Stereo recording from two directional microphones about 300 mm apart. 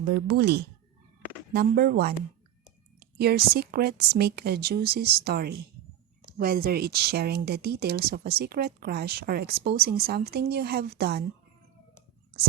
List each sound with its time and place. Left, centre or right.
0.1 s speech: right